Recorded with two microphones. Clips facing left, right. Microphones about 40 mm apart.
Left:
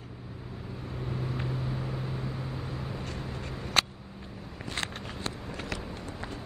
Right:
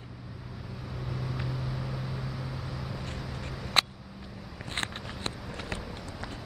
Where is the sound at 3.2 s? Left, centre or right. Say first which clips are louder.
Left 1 dB; left.